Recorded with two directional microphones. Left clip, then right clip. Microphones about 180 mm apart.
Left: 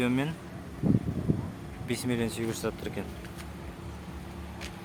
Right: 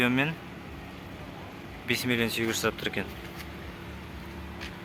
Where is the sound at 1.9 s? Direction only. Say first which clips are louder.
Right 4 dB; 10° left (ahead or behind).